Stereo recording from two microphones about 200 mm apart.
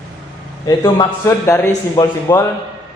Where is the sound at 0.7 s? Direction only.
20° left (ahead or behind).